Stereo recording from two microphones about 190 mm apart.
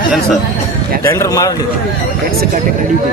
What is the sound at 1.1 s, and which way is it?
Speech, 15° left (ahead or behind).